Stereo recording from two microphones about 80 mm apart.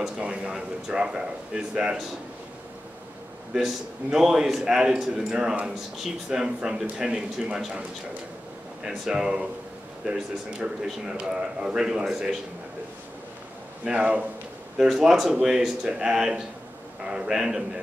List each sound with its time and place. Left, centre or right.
0.2 s a man's voice: centre
3.5 s a man's voice: centre
8.8 s a man's voice: centre
13.8 s a man's voice: centre
14.8 s a man's voice: centre